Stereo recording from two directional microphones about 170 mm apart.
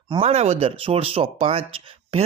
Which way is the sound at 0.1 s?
35° right (ahead or behind).